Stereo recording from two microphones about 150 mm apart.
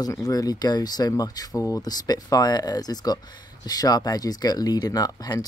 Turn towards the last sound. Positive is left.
turn(degrees=25)  # may be behind; listen again after turning